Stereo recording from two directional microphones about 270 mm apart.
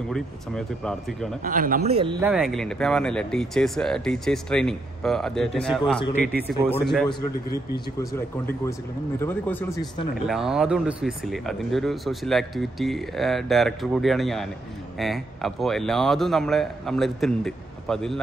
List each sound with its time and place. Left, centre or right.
0.1 s speech: centre
1.4 s speech: right
2.2 s speech: centre
5.9 s speech: centre
6.7 s speech: centre
9.2 s speech: centre
10.2 s speech: centre